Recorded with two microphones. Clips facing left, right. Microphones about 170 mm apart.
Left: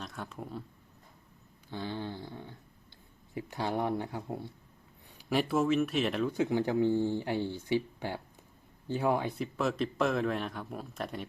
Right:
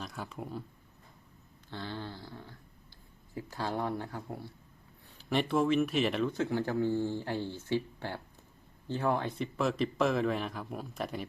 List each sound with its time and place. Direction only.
0.0 s speech: centre (ahead or behind)
1.7 s speech: 15° left (ahead or behind)
5.3 s speech: 5° left (ahead or behind)
6.3 s speech: 15° left (ahead or behind)
9.4 s speech: centre (ahead or behind)